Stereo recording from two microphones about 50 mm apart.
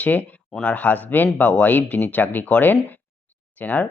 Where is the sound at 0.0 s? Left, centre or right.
Left.